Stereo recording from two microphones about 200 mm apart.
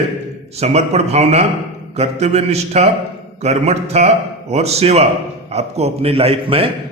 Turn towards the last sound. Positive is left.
turn(degrees=-30)  # may be behind; listen again after turning